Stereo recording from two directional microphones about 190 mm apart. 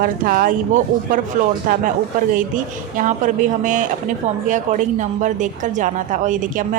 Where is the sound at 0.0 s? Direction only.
45° right (ahead or behind).